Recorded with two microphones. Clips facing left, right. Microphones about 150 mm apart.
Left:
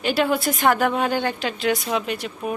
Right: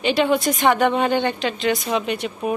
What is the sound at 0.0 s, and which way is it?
A woman's voice, centre (ahead or behind).